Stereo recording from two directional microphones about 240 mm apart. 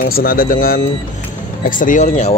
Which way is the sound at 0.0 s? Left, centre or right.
Left.